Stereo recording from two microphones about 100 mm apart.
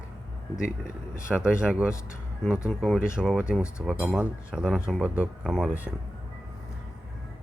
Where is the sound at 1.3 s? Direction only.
10° right (ahead or behind).